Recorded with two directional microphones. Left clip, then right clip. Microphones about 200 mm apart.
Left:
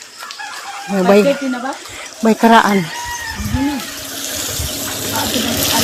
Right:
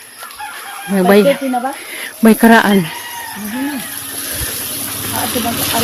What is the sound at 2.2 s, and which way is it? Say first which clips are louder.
Speech: right 1 dB; 40° right (ahead or behind).